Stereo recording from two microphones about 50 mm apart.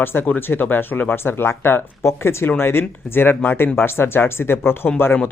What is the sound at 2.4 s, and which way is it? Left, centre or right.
Speech, left.